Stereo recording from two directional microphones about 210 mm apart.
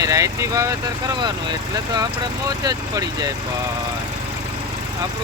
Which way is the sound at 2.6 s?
20° right (ahead or behind).